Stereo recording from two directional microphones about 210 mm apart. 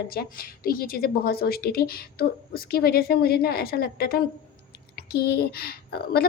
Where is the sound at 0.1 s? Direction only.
45° left (ahead or behind).